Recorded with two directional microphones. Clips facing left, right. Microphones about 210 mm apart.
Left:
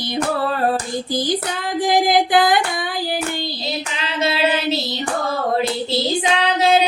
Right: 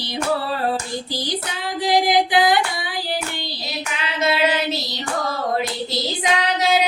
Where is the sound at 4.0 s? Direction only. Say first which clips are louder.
Even; 30° left (ahead or behind).